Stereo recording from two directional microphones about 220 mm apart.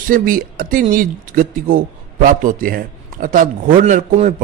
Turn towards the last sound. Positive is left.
turn(degrees=-35)  # may be behind; listen again after turning